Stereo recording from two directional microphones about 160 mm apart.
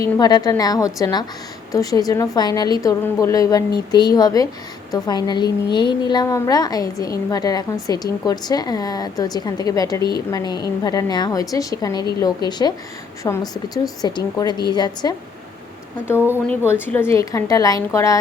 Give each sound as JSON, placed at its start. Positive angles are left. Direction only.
{"t": 0.0, "sound": "a woman's voice", "side_deg": 25}
{"t": 16.8, "sound": "a woman's voice", "side_deg": 15}